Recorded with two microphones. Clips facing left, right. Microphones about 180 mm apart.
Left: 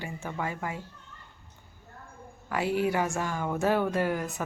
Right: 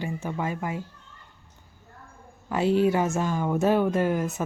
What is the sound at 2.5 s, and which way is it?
Speech, 20° right (ahead or behind).